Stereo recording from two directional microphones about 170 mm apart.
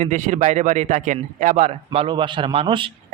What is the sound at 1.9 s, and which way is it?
Speech, 30° right (ahead or behind).